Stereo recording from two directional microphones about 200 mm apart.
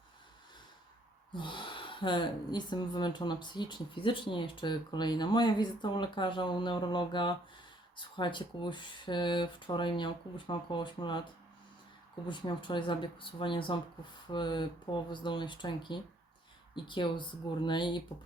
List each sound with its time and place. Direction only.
1.3 s speech: 25° left (ahead or behind)
12.3 s speech: 25° left (ahead or behind)